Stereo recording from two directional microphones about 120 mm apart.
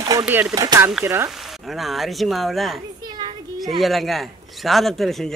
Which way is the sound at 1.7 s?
Centre (ahead or behind).